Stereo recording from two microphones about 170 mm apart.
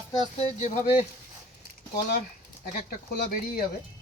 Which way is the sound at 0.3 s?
40° left (ahead or behind).